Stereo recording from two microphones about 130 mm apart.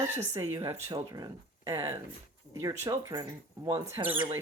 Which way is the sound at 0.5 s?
20° right (ahead or behind).